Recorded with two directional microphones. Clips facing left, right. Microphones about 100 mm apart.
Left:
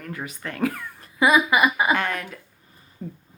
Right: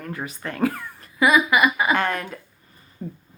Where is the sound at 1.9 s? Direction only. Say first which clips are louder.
Right 2 dB; 40° right (ahead or behind).